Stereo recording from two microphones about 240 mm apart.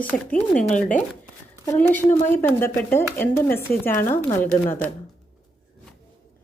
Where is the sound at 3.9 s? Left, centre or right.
Left.